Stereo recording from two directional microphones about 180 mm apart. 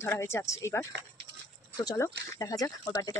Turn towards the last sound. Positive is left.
turn(degrees=20)  # may be behind; listen again after turning